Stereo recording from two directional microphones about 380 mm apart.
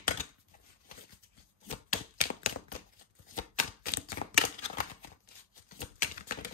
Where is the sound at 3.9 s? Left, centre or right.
Left.